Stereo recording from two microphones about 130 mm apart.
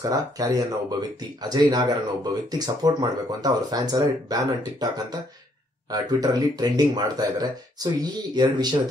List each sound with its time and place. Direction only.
0.0 s speech: 30° right (ahead or behind)